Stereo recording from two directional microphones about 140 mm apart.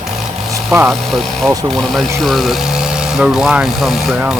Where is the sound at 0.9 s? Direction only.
Centre (ahead or behind).